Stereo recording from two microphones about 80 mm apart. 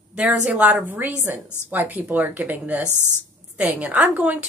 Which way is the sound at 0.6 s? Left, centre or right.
Right.